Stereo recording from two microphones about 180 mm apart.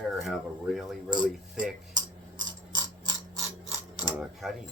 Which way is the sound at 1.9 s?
25° right (ahead or behind).